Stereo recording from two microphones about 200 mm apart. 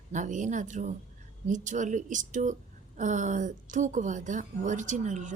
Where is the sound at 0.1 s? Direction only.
40° right (ahead or behind).